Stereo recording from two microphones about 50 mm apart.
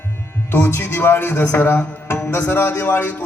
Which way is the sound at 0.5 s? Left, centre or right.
Left.